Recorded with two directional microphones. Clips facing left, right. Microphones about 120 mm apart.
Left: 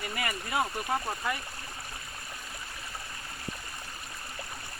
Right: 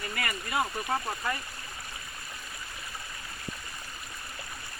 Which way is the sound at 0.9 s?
5° left (ahead or behind).